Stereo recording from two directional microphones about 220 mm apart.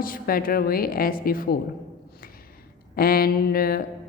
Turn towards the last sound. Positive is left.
turn(degrees=40)  # may be behind; listen again after turning